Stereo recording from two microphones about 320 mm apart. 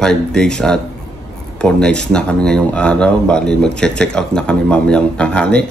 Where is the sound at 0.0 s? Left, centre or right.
Centre.